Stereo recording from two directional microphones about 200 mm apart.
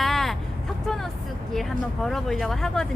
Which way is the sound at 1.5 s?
Centre (ahead or behind).